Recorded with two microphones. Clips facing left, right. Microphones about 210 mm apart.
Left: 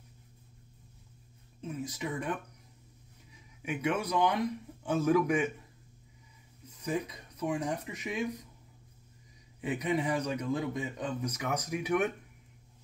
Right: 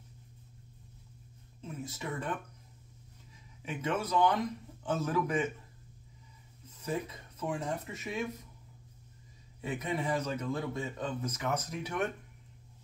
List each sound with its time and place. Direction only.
1.8 s a man's voice: 15° left (ahead or behind)
3.6 s a man's voice: 10° left (ahead or behind)
6.8 s a man's voice: 15° left (ahead or behind)
9.6 s a man's voice: 15° left (ahead or behind)